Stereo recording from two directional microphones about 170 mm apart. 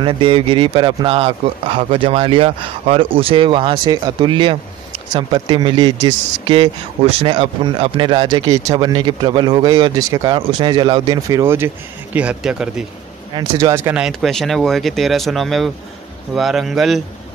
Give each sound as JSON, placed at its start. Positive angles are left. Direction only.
{"t": 0.0, "sound": "speech", "side_deg": -30}
{"t": 13.3, "sound": "speech", "side_deg": -20}